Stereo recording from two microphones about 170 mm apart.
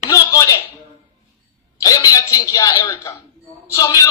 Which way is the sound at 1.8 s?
20° left (ahead or behind).